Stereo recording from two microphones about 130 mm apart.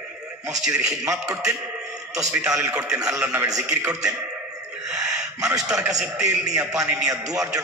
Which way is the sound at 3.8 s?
25° right (ahead or behind).